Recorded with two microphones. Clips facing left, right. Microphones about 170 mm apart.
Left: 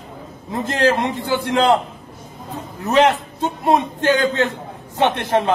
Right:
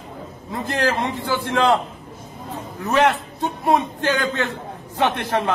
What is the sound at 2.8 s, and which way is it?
A man's voice, 20° left (ahead or behind).